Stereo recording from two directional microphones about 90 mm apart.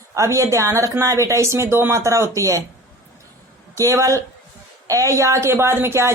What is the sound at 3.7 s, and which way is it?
Speech, 35° right (ahead or behind).